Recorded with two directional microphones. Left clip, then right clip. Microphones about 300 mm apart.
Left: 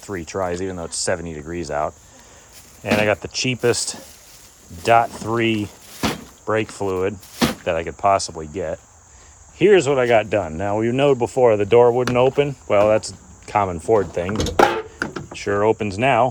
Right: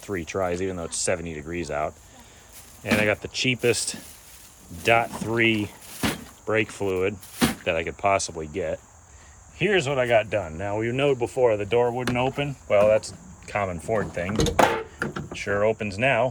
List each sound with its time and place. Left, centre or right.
0.0 s speech: centre